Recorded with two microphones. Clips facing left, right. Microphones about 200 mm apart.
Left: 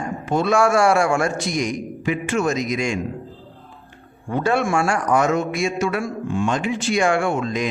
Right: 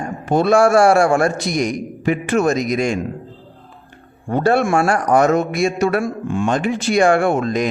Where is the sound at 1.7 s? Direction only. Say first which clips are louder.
Right 4 dB; 60° right (ahead or behind).